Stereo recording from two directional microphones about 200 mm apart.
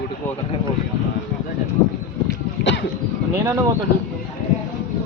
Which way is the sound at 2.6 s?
60° left (ahead or behind).